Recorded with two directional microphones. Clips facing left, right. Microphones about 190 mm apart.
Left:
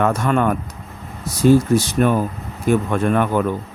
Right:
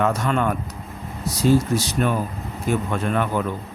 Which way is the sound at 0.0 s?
50° left (ahead or behind).